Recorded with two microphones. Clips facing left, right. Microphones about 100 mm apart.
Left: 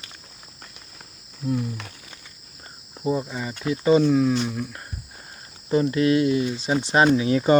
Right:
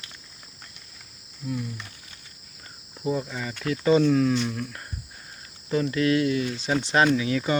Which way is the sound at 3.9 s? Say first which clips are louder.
Left 2 dB; 5° left (ahead or behind).